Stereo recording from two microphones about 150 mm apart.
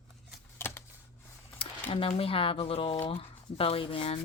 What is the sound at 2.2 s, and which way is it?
Speech, 40° left (ahead or behind).